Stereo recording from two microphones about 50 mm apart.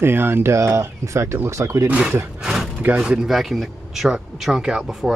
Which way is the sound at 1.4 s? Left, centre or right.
Right.